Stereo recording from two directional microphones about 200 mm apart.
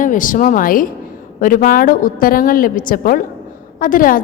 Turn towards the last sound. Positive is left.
turn(degrees=45)  # may be behind; listen again after turning